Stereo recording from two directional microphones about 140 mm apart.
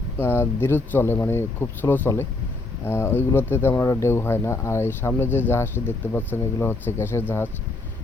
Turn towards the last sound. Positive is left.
turn(degrees=15)  # may be behind; listen again after turning